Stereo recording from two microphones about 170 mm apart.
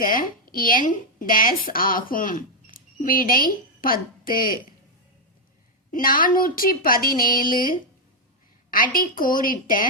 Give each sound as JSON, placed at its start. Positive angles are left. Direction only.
{"t": 0.0, "sound": "speech", "side_deg": 55}
{"t": 5.9, "sound": "a woman's voice", "side_deg": 55}